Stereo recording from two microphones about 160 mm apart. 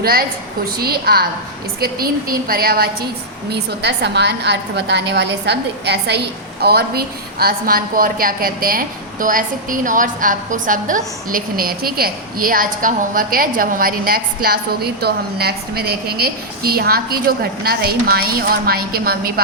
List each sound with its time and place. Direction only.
0.0 s a woman's voice: 70° right (ahead or behind)
3.5 s a woman's voice: 90° right; by 19.3 s 70° right (ahead or behind)